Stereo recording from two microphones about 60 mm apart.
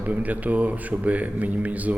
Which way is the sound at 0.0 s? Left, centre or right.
Right.